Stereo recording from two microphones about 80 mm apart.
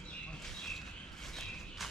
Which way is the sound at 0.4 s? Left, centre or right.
Centre.